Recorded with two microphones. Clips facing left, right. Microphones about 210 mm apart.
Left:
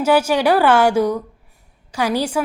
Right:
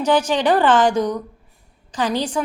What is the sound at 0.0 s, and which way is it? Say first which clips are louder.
A woman's voice: left 2 dB; 10° left (ahead or behind).